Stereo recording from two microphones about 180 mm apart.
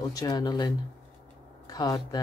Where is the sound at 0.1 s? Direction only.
20° left (ahead or behind).